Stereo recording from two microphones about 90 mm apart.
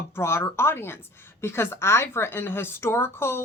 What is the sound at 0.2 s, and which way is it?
A woman's voice, 30° left (ahead or behind).